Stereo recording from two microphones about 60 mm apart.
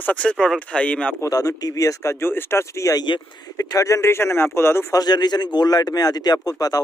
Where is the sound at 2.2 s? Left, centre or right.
Left.